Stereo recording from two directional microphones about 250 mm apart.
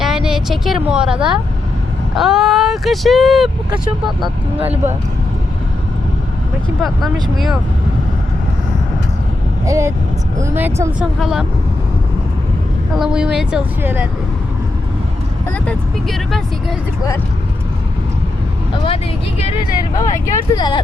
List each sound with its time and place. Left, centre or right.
0.0 s speech: centre
6.8 s speech: centre
9.6 s speech: centre
13.0 s speech: centre
15.5 s speech: centre
19.4 s speech: left
20.0 s speech: centre